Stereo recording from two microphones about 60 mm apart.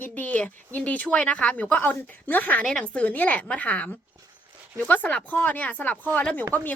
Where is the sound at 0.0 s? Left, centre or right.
Left.